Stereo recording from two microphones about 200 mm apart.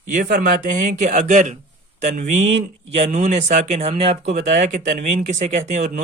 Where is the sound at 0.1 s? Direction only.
45° right (ahead or behind).